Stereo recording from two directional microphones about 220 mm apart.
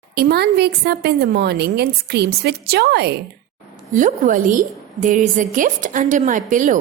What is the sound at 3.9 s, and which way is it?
A woman's voice, 35° right (ahead or behind).